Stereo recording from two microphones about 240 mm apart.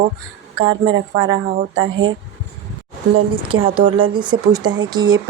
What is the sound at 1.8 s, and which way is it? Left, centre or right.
Speech, right.